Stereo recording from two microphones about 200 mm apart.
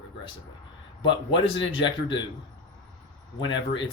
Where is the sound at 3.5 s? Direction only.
25° left (ahead or behind).